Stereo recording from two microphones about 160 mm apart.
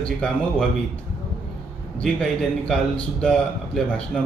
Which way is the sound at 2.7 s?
5° left (ahead or behind).